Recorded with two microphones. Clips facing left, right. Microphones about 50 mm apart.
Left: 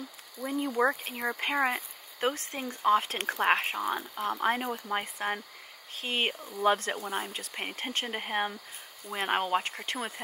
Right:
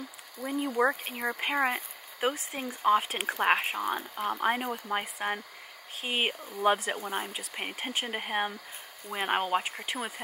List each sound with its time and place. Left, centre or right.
0.4 s speech: centre